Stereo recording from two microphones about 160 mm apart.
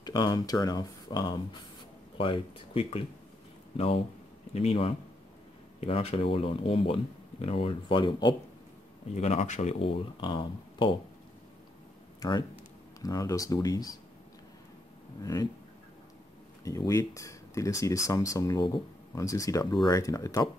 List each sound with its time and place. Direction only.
0.0 s speech: 25° left (ahead or behind)
12.2 s speech: 25° left (ahead or behind)
16.6 s speech: 20° left (ahead or behind)